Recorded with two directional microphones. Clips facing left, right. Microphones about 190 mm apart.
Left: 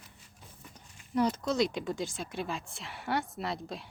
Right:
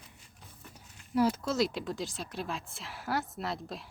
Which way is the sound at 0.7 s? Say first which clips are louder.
Right 1 dB; 5° right (ahead or behind).